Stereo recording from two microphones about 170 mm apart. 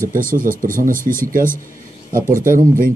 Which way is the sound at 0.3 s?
55° right (ahead or behind).